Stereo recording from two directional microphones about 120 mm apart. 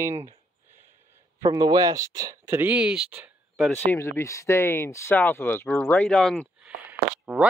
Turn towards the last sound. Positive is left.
turn(degrees=-5)  # may be behind; listen again after turning